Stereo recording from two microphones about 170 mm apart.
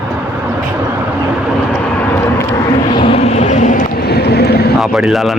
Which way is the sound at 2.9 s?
30° left (ahead or behind).